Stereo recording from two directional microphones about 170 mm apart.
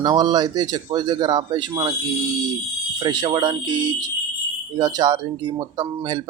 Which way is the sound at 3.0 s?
25° right (ahead or behind).